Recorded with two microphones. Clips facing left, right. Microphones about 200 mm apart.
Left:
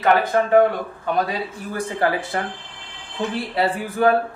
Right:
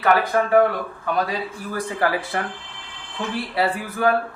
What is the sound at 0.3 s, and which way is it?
Speech, 25° left (ahead or behind).